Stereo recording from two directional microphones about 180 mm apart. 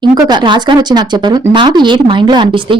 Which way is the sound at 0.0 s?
25° right (ahead or behind).